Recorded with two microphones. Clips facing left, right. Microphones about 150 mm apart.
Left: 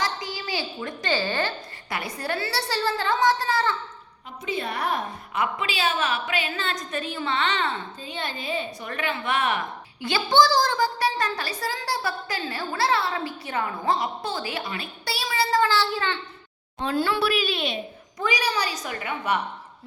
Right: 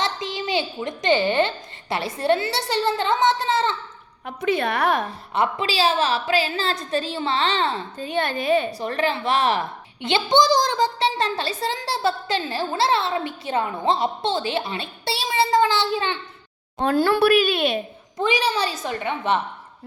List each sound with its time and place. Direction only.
0.0 s a child's voice: 25° right (ahead or behind)
4.3 s a woman's voice: 65° right (ahead or behind)
5.3 s a woman's voice: 30° right (ahead or behind)
7.9 s a woman's voice: 55° right (ahead or behind)
8.8 s a woman's voice: 35° right (ahead or behind)
16.7 s speech: 50° right (ahead or behind)
18.2 s a woman's voice: 25° right (ahead or behind)